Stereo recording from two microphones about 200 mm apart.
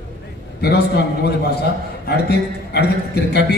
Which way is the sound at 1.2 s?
55° left (ahead or behind).